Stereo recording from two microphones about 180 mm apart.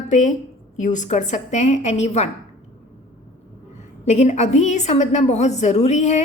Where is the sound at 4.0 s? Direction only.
40° left (ahead or behind).